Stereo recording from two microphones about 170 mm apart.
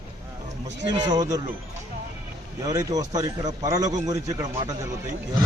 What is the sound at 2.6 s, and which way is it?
A man's voice, 20° right (ahead or behind).